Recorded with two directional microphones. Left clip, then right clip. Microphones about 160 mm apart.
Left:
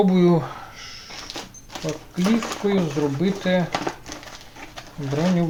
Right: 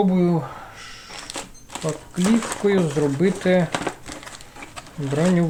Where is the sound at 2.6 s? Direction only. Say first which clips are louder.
Right 4 dB; 35° right (ahead or behind).